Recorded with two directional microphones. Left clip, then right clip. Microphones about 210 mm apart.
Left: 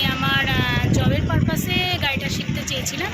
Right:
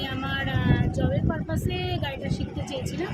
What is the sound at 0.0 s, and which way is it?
Vehicle, 5° right (ahead or behind).